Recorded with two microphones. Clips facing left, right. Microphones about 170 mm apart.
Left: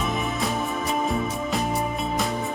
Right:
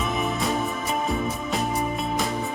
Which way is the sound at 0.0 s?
Centre (ahead or behind).